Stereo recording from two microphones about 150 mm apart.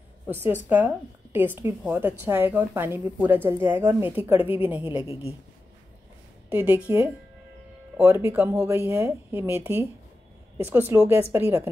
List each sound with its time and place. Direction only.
0.3 s a woman's voice: 15° right (ahead or behind)
6.5 s a woman's voice: 10° right (ahead or behind)